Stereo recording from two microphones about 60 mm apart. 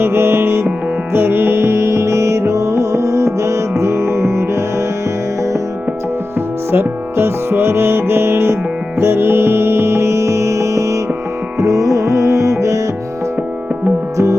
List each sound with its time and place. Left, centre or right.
0.0 s music: right
6.7 s music: right